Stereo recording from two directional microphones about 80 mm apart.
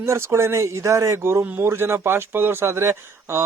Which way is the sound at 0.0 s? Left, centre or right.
Right.